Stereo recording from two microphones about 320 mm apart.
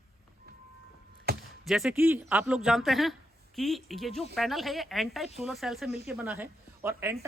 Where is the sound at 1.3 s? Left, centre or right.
Right.